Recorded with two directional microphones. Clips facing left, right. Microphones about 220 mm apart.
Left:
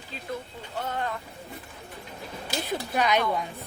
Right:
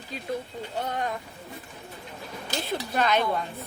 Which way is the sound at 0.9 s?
15° right (ahead or behind).